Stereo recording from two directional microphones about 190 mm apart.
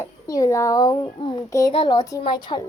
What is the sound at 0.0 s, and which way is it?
A woman's voice, 20° left (ahead or behind).